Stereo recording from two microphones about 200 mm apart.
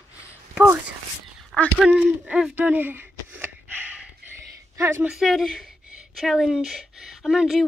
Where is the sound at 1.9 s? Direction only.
5° right (ahead or behind).